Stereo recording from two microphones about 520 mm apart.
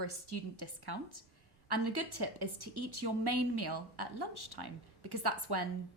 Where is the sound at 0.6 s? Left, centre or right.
Right.